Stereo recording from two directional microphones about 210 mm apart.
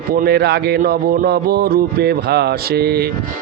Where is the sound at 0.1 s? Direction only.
45° right (ahead or behind).